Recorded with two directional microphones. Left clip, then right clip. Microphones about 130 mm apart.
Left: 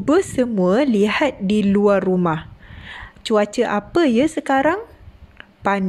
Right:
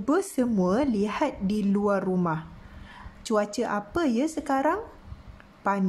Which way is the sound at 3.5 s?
40° left (ahead or behind).